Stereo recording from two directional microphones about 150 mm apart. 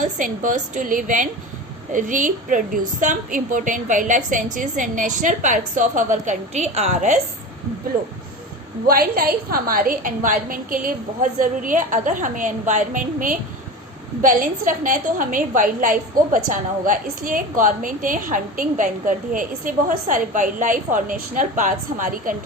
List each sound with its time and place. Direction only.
0.0 s a woman's voice: 55° right (ahead or behind)
8.9 s a woman's voice: 75° right (ahead or behind)